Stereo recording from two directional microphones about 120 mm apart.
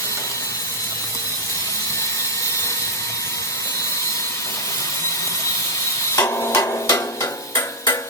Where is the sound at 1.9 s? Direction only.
25° left (ahead or behind).